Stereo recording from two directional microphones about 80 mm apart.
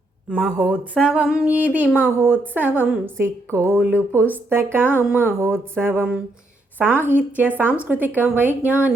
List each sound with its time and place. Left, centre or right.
0.3 s speech: centre
1.5 s speech: right
3.5 s music: right
3.8 s a woman's voice: centre